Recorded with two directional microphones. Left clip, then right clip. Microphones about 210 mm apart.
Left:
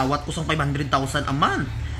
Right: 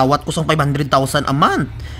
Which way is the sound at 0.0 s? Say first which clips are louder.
Right 9 dB; 60° right (ahead or behind).